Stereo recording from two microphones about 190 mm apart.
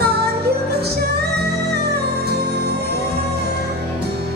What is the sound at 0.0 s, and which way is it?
Music, 55° right (ahead or behind).